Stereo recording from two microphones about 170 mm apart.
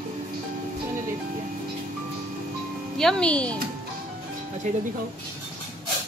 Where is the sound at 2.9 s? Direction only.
5° left (ahead or behind).